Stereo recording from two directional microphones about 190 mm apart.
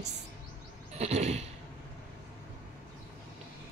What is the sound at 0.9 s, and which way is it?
Speech, 35° right (ahead or behind).